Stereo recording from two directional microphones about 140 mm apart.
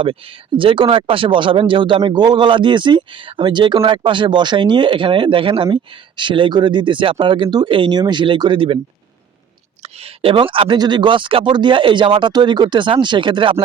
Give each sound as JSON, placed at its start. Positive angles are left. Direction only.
{"t": 0.0, "sound": "speech", "side_deg": -40}
{"t": 10.0, "sound": "speech", "side_deg": -40}